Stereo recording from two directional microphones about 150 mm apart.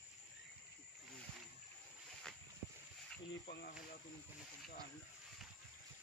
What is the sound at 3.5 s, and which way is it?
Speech, 90° left.